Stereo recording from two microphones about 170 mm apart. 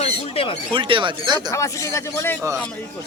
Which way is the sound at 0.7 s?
30° right (ahead or behind).